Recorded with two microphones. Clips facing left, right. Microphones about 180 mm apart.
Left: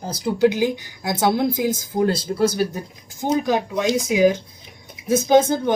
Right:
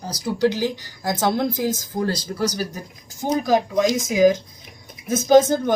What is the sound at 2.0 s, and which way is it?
Speech, 25° left (ahead or behind).